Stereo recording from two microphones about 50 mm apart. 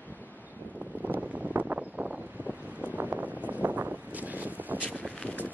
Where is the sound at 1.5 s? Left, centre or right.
Right.